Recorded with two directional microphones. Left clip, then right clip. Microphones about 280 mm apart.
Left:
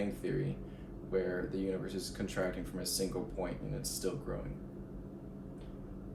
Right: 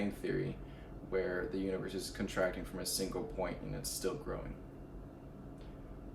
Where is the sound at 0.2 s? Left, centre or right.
Centre.